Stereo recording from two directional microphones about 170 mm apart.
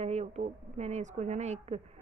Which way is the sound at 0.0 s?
40° right (ahead or behind).